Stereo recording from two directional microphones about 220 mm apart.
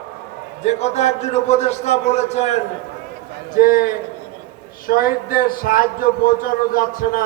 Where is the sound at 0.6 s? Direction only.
30° left (ahead or behind).